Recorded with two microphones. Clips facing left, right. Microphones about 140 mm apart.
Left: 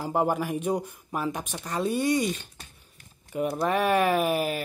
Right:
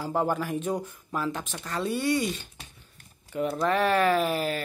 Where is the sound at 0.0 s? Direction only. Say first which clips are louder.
Left 1 dB; 15° left (ahead or behind).